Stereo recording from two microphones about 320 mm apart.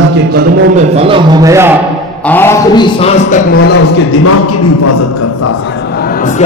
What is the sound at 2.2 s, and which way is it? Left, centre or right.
A man's voice, centre.